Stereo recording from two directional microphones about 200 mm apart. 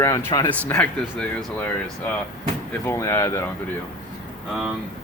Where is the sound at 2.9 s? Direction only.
15° left (ahead or behind).